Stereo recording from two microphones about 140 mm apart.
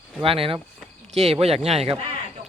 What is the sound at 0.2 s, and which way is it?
Speech, 40° right (ahead or behind).